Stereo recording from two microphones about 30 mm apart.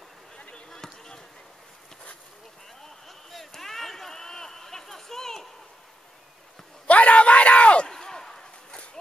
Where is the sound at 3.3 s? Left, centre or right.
Centre.